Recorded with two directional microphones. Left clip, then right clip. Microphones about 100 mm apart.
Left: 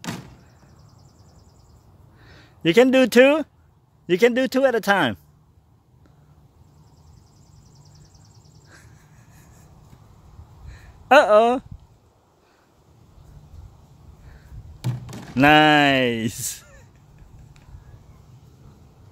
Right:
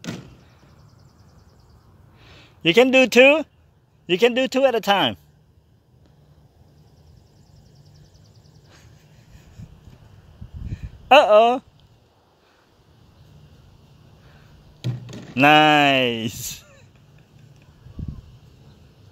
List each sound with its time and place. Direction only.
2.1 s a man's voice: 35° left (ahead or behind)
10.7 s a sound: 50° left (ahead or behind)
15.3 s speech: 35° left (ahead or behind); by 16.8 s 60° left (ahead or behind)